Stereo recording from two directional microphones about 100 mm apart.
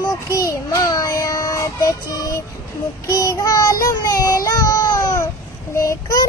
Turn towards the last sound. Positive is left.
turn(degrees=35)  # may be behind; listen again after turning